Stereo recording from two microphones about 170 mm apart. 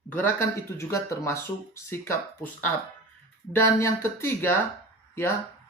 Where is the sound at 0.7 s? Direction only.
15° left (ahead or behind).